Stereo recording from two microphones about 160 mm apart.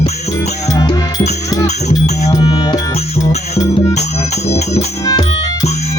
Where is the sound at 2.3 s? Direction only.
25° left (ahead or behind).